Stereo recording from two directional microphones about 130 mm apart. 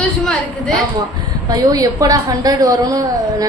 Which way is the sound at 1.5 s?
25° right (ahead or behind).